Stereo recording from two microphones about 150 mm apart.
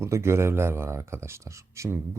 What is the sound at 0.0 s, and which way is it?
Speech, 15° right (ahead or behind).